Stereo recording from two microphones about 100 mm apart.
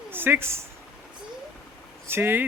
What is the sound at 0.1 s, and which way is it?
Speech, 20° right (ahead or behind).